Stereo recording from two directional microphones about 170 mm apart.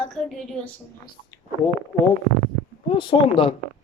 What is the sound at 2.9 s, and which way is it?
Speech, 30° left (ahead or behind).